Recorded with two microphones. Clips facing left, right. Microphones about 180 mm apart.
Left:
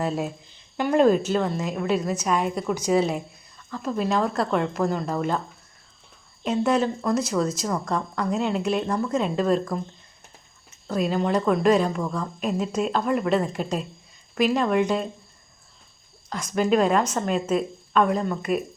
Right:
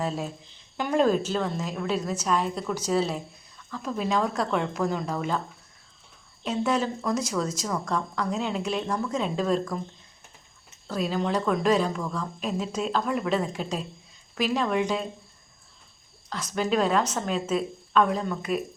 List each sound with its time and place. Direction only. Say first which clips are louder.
0.8 s a woman's voice: left 4 dB; 5° left (ahead or behind)
3.7 s speech: left 3 dB; centre (ahead or behind)
6.4 s speech: left 4 dB; 5° left (ahead or behind)
11.0 s speech: left 3 dB; 5° left (ahead or behind)
16.3 s speech: left 4 dB; 10° left (ahead or behind)